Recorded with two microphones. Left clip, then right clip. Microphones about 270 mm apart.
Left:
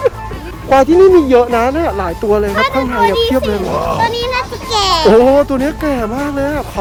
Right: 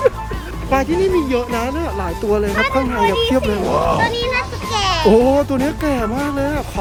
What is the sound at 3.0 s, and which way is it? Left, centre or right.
Speech, left.